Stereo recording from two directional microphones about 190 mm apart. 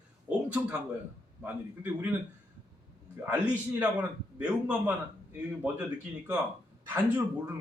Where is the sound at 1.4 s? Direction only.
10° right (ahead or behind).